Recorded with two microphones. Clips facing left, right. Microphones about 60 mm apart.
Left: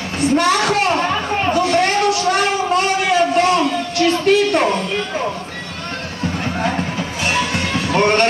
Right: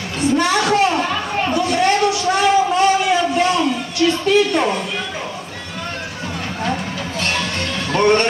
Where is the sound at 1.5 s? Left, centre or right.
Left.